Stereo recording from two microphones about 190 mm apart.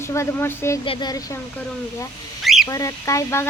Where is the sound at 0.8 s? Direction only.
25° left (ahead or behind).